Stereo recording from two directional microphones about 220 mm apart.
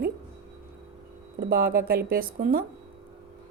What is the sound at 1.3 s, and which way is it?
Speech, 45° right (ahead or behind).